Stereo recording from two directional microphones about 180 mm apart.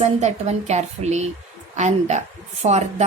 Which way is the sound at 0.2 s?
40° right (ahead or behind).